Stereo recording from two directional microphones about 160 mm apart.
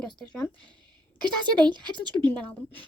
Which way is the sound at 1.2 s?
30° right (ahead or behind).